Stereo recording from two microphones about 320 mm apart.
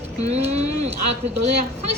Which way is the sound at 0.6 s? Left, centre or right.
Right.